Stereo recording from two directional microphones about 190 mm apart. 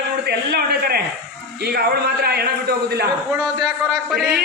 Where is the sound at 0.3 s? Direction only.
55° right (ahead or behind).